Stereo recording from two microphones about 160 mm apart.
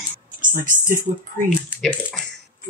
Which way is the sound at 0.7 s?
55° right (ahead or behind).